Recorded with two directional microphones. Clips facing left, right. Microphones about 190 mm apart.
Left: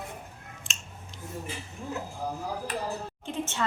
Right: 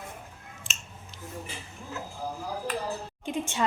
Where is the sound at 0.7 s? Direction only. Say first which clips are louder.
Right 2 dB; centre (ahead or behind).